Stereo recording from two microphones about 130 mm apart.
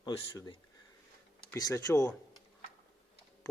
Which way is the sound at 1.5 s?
25° left (ahead or behind).